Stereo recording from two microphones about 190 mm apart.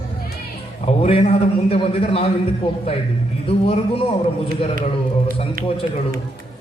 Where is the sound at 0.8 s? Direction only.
30° left (ahead or behind).